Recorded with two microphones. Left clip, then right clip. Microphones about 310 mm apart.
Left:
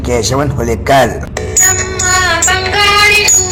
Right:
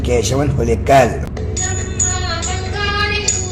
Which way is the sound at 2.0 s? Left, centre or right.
Left.